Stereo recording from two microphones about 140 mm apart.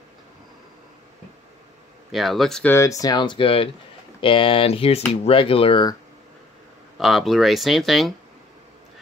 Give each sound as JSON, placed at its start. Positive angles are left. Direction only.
{"t": 2.1, "sound": "speech", "side_deg": 0}
{"t": 2.7, "sound": "speech", "side_deg": 20}
{"t": 7.0, "sound": "speech", "side_deg": 0}